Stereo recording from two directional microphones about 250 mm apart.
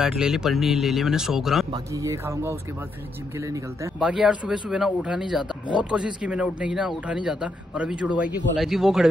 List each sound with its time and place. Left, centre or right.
0.0 s speech: centre
1.7 s speech: centre